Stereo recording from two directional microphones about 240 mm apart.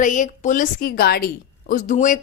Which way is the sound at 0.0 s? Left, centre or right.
Left.